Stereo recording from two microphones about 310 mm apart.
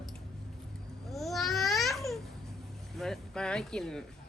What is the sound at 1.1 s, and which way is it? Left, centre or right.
Babbling, centre.